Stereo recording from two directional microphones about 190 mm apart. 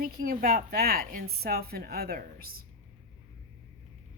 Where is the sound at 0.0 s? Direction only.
50° right (ahead or behind).